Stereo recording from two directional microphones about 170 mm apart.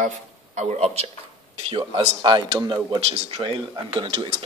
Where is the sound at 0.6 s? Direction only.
40° right (ahead or behind); by 3.0 s 20° right (ahead or behind).